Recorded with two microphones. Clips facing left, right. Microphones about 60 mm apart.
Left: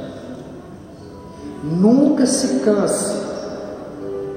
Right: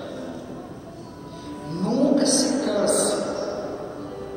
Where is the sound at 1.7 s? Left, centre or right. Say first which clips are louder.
Left 8 dB; left.